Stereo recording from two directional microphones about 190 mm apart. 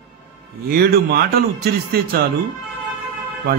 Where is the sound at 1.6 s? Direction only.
55° right (ahead or behind).